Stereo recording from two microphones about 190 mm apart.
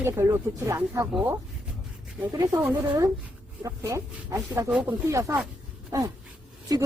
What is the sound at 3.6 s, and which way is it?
Speech, 15° right (ahead or behind).